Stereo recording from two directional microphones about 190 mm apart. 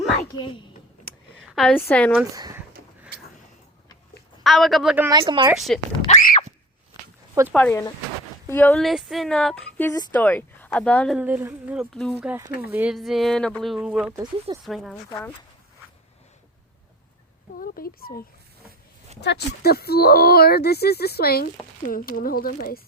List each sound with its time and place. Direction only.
1.4 s a sound: centre (ahead or behind)
1.8 s speech: 10° left (ahead or behind)
2.1 s speech: 15° right (ahead or behind)
4.4 s speech: centre (ahead or behind)
5.2 s speech: 25° right (ahead or behind)
5.5 s speech: centre (ahead or behind)
6.1 s a sound: 45° left (ahead or behind)
7.4 s speech: 15° right (ahead or behind)
7.7 s speech: 15° left (ahead or behind)
11.2 s speech: 10° right (ahead or behind)
17.6 s speech: 50° left (ahead or behind)
19.2 s speech: 60° left (ahead or behind)